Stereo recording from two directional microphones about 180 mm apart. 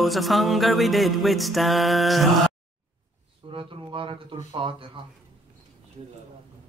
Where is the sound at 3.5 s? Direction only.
30° right (ahead or behind).